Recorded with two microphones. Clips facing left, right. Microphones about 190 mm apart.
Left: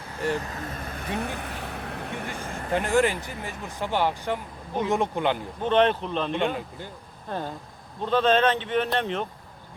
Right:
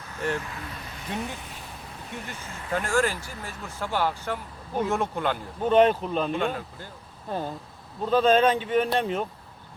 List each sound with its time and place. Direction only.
0.4 s speech: 45° left (ahead or behind)
2.7 s speech: 20° left (ahead or behind)
5.6 s speech: 5° right (ahead or behind)